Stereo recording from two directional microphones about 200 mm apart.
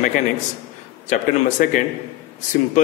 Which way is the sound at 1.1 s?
40° left (ahead or behind).